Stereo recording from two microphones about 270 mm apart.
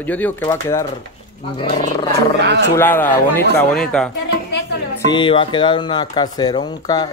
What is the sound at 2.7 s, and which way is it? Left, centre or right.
Speech, centre.